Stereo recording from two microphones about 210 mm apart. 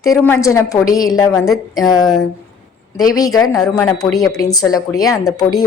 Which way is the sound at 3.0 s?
15° left (ahead or behind).